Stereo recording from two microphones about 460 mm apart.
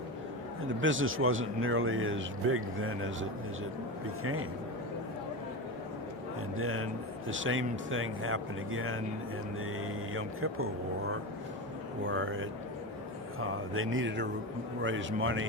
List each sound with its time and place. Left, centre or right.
0.7 s a man's voice: right
6.6 s a man's voice: right
12.0 s a man's voice: right